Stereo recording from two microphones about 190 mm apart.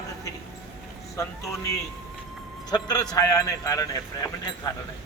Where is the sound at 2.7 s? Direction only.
20° left (ahead or behind).